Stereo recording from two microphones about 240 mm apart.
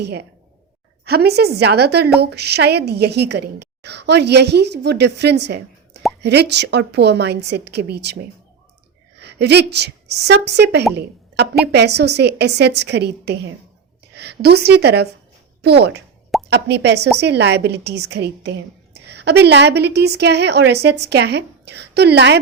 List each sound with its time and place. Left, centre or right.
0.0 s a woman's voice: right